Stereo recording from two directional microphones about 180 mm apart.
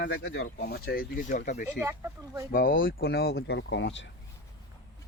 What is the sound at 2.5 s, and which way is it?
Speech, 50° left (ahead or behind).